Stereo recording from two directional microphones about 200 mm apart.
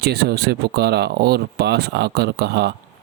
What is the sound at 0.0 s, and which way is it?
Speech, 55° right (ahead or behind).